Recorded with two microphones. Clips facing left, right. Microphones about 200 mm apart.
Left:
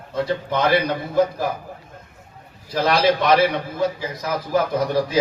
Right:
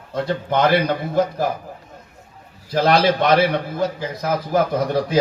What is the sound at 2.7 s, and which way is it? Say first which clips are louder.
A man's voice: right 2 dB; 55° right (ahead or behind).